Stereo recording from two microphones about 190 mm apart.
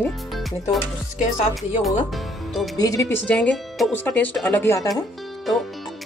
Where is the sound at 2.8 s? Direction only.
15° left (ahead or behind).